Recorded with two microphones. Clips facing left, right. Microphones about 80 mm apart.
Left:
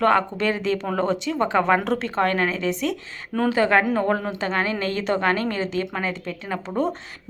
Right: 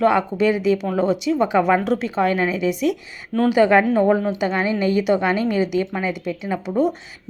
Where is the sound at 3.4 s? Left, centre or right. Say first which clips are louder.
Right 4 dB; centre.